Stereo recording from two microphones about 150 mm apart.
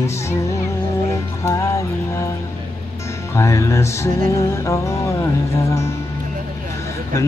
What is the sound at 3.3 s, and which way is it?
Music, 20° left (ahead or behind).